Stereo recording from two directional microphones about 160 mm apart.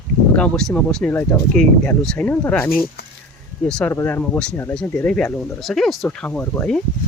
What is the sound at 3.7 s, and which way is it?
Speech, 5° left (ahead or behind).